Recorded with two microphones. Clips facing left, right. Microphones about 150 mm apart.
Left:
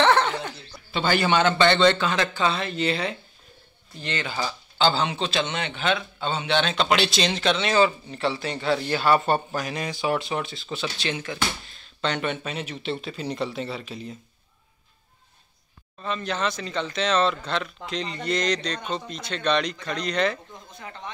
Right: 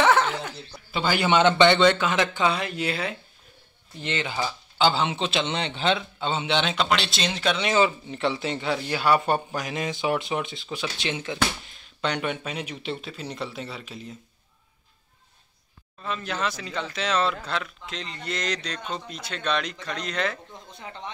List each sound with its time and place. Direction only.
0.0 s a sound: 5° right (ahead or behind)
0.9 s speech: 10° right (ahead or behind)
1.3 s speech: 20° right (ahead or behind)
4.0 s speech: 20° right (ahead or behind)
6.9 s speech: centre (ahead or behind)
16.0 s speech: 5° right (ahead or behind)